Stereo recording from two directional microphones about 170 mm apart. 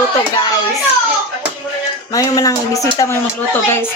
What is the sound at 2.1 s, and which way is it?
Speech, 20° left (ahead or behind).